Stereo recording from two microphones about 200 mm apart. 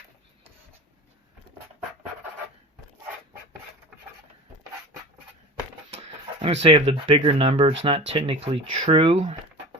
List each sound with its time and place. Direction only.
6.0 s speech: 30° right (ahead or behind)